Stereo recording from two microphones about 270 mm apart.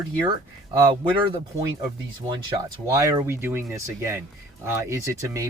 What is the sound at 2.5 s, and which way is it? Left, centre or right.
Speech, centre.